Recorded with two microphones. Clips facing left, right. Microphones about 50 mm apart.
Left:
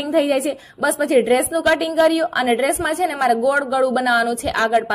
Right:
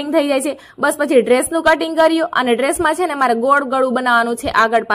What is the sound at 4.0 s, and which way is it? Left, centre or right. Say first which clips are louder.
Speech: right 3 dB; right.